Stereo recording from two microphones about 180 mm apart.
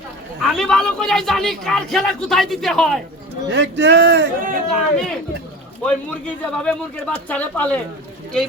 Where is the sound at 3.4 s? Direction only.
80° right.